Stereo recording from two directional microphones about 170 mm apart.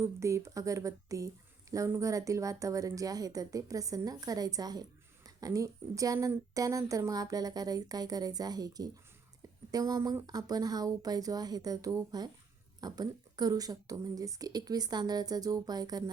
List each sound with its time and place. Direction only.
0.0 s speech: 15° right (ahead or behind)